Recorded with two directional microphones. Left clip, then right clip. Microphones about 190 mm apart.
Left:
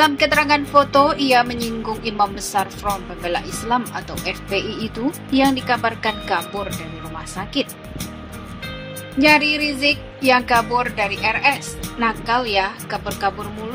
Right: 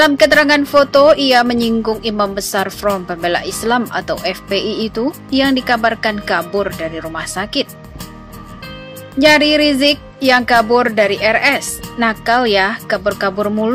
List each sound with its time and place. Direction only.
0.0 s a woman's voice: 15° right (ahead or behind)
9.2 s a woman's voice: 20° right (ahead or behind)